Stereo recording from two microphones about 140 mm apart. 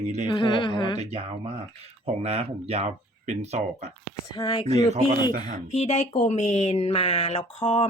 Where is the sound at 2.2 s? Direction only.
50° right (ahead or behind).